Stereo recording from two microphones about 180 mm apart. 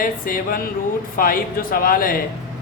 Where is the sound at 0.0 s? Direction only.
50° left (ahead or behind).